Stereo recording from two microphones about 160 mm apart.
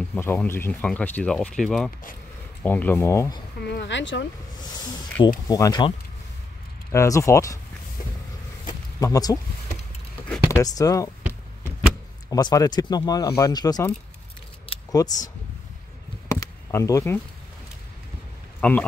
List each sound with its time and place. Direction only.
0.0 s speech: 10° left (ahead or behind)
3.6 s speech: 90° left
5.5 s speech: 25° left (ahead or behind)
9.0 s speech: 20° left (ahead or behind)
10.5 s speech: 20° left (ahead or behind)
12.3 s speech: 25° left (ahead or behind)
14.9 s speech: 20° left (ahead or behind)
16.3 s a sound: 20° left (ahead or behind)
18.6 s speech: 5° left (ahead or behind)